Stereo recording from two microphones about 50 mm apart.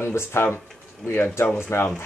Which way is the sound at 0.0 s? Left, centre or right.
Left.